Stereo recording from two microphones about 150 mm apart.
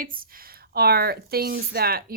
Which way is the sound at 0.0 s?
70° right (ahead or behind).